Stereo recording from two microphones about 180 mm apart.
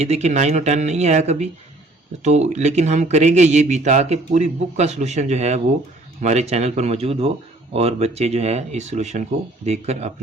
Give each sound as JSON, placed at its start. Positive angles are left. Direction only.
{"t": 0.0, "sound": "a man's voice", "side_deg": -35}